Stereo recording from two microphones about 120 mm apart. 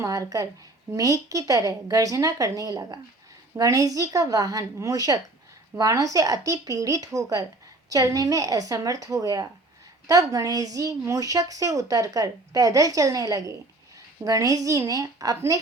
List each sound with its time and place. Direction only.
0.0 s speech: 30° right (ahead or behind)